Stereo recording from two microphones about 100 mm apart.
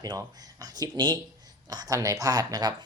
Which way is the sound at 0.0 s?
40° right (ahead or behind).